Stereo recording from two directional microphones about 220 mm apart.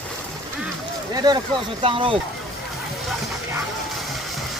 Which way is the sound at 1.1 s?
20° right (ahead or behind).